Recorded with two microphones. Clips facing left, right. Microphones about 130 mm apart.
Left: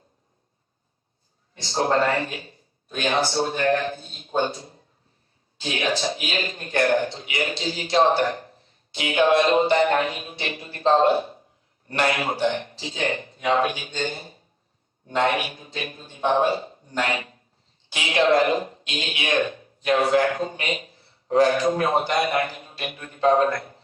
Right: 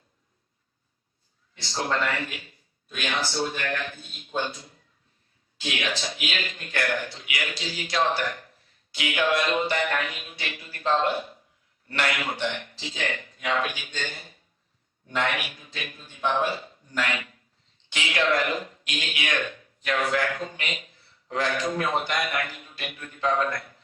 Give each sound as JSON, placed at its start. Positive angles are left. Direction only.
{"t": 1.6, "sound": "a man's voice", "side_deg": 30}